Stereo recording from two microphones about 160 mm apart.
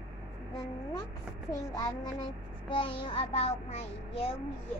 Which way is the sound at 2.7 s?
35° left (ahead or behind).